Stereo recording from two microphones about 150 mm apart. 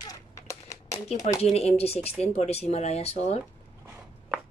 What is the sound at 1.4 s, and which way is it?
Speech, 45° left (ahead or behind).